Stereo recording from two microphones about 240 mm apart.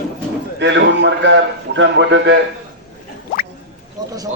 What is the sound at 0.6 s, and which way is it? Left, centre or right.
A man's voice, right.